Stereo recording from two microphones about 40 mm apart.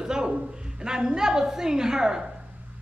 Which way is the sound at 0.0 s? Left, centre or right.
Centre.